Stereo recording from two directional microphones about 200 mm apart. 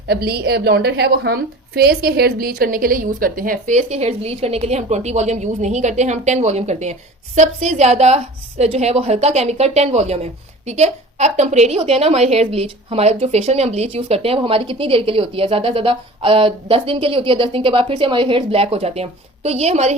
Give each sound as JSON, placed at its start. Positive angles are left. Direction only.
{"t": 0.1, "sound": "a woman's voice", "side_deg": -55}